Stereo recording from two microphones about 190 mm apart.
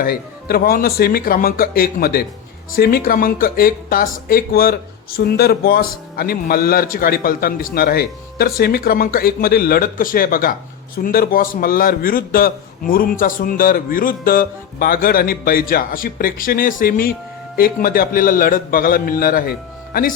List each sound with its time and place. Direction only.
0.0 s a man's voice: 50° left (ahead or behind)